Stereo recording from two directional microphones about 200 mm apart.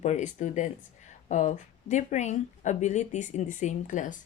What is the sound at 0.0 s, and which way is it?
Speech, 35° left (ahead or behind).